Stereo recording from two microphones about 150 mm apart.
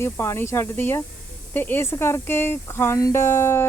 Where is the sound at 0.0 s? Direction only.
15° left (ahead or behind).